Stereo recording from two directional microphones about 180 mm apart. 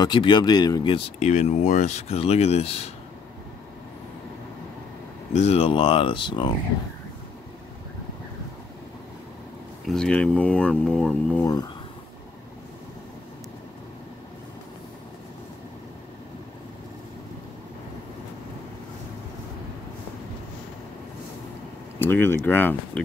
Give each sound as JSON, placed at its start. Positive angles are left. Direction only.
{"t": 0.0, "sound": "speech", "side_deg": 25}
{"t": 1.2, "sound": "speech", "side_deg": 40}
{"t": 5.3, "sound": "speech", "side_deg": 35}
{"t": 9.8, "sound": "speech", "side_deg": 5}
{"t": 11.4, "sound": "speech", "side_deg": 20}
{"t": 22.0, "sound": "speech", "side_deg": 10}